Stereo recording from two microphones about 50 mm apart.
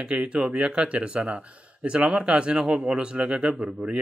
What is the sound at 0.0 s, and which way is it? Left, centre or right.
A man's voice, right.